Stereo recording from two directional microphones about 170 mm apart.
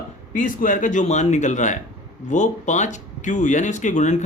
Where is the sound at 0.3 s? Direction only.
50° left (ahead or behind).